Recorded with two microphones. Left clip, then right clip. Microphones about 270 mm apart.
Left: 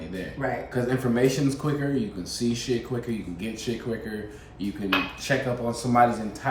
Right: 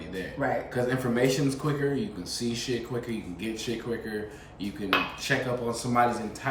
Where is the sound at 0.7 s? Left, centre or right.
Centre.